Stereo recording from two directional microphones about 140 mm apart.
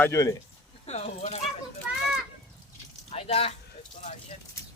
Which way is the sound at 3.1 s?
45° left (ahead or behind).